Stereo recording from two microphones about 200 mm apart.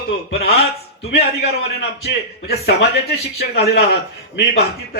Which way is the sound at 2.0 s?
55° left (ahead or behind).